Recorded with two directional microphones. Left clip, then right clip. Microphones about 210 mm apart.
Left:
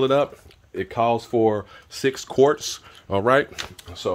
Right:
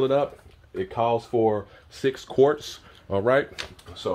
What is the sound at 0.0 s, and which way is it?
Speech, 40° left (ahead or behind).